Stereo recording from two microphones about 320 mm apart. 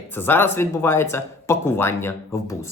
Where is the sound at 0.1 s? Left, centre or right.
Centre.